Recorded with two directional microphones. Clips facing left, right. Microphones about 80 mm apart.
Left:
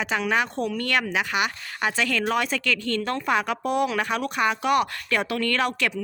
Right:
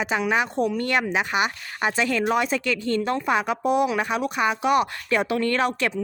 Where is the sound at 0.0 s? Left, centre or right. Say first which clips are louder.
Right 1 dB; centre.